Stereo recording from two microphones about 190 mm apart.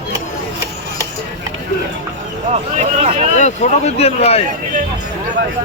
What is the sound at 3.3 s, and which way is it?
Speech, 40° left (ahead or behind).